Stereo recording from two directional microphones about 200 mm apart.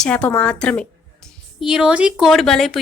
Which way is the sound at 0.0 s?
5° left (ahead or behind).